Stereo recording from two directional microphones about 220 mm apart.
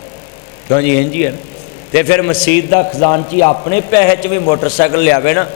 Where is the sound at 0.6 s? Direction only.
15° left (ahead or behind).